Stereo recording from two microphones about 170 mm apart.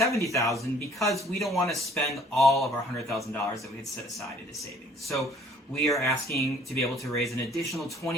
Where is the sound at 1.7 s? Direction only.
Centre (ahead or behind).